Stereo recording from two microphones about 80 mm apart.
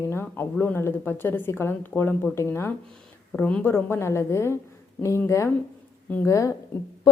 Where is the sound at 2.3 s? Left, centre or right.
Left.